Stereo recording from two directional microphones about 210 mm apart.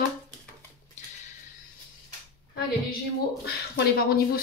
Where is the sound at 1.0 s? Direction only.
35° left (ahead or behind).